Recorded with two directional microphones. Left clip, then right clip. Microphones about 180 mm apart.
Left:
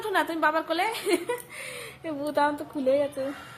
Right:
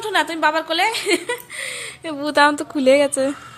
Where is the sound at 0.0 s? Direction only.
Centre (ahead or behind); by 3.2 s 20° right (ahead or behind).